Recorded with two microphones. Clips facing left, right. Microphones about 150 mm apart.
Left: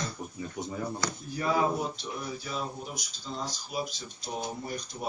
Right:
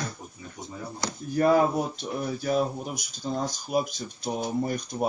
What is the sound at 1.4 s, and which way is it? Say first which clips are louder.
Speech: right 7 dB; 55° right (ahead or behind).